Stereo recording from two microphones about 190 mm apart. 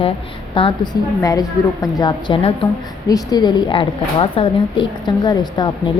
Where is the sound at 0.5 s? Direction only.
25° left (ahead or behind).